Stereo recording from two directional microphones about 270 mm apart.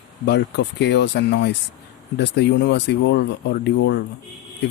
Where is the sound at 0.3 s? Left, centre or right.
Left.